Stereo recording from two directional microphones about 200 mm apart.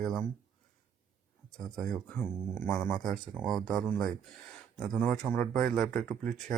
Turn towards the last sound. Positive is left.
turn(degrees=0)  # may be behind; listen again after turning